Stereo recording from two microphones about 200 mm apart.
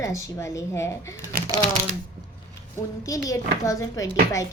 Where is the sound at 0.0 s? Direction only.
15° left (ahead or behind).